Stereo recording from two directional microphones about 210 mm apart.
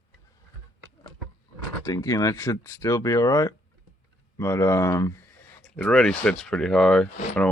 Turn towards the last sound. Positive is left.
turn(degrees=5)  # may be behind; listen again after turning